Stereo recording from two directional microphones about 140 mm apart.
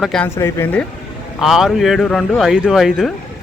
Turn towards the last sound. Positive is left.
turn(degrees=-5)  # may be behind; listen again after turning